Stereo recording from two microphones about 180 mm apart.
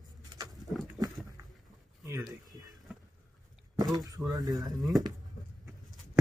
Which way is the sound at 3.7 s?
20° right (ahead or behind).